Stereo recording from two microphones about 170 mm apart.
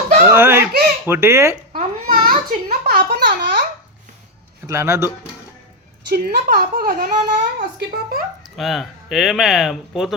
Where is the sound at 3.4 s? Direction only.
75° right (ahead or behind).